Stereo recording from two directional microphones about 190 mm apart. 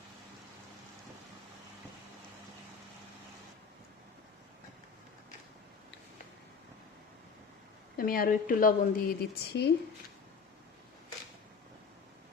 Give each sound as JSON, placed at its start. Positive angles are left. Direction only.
{"t": 7.9, "sound": "a woman's voice", "side_deg": 50}